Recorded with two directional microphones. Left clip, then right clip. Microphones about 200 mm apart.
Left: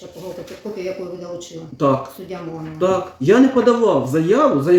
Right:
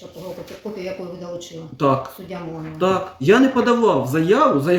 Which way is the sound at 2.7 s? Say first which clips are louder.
Left 1 dB; 40° right (ahead or behind).